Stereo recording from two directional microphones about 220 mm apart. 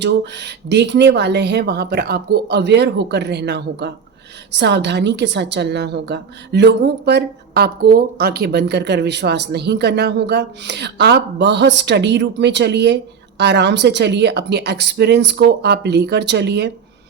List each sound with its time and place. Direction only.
0.0 s a woman's voice: 50° right (ahead or behind)